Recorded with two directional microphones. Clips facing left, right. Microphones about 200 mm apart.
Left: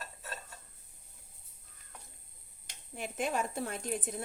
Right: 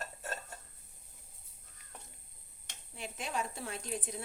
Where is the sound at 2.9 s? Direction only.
50° left (ahead or behind).